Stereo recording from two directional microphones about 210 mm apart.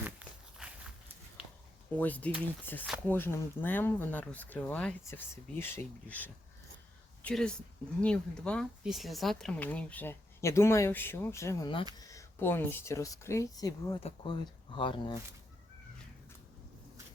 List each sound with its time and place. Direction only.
0.5 s walk: centre (ahead or behind)
1.4 s a sound: 5° right (ahead or behind)
2.0 s speech: 5° left (ahead or behind); by 15.1 s 25° left (ahead or behind)